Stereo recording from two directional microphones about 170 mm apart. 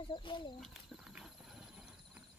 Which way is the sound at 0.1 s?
30° left (ahead or behind).